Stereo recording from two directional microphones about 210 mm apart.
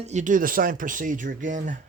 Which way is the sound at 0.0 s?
35° right (ahead or behind).